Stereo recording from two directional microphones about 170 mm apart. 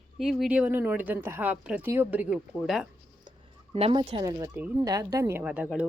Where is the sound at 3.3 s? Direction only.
35° right (ahead or behind).